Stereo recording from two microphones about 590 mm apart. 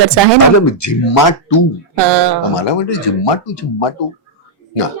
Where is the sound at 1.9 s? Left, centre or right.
Right.